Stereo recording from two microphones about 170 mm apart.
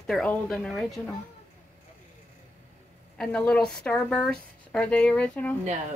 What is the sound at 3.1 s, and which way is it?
A woman's voice, 5° left (ahead or behind).